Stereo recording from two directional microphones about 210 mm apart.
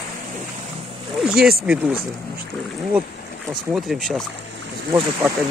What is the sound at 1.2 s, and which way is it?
Boat, centre (ahead or behind).